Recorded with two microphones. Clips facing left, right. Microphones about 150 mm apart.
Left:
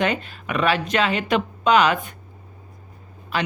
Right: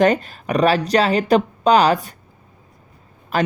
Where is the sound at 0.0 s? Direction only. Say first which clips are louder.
Right 7 dB; 40° right (ahead or behind).